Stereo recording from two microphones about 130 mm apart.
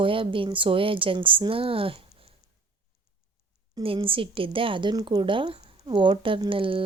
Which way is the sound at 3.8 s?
45° right (ahead or behind).